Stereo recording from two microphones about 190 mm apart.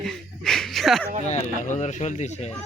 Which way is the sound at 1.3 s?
40° left (ahead or behind).